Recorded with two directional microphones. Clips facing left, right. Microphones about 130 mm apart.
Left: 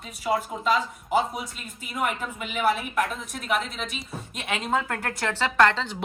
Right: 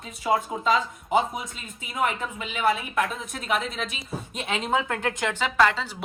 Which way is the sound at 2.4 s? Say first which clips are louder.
Even; 5° left (ahead or behind).